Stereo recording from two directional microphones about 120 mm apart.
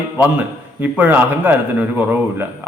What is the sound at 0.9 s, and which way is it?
Speech, 15° right (ahead or behind).